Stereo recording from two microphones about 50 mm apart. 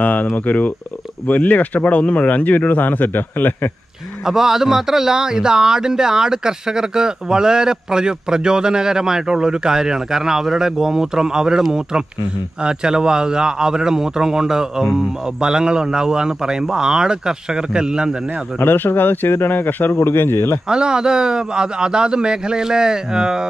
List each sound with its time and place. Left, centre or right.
0.0 s speech: left
4.3 s speech: centre
12.6 s speech: centre
18.6 s speech: left
20.0 s speech: left
20.6 s speech: centre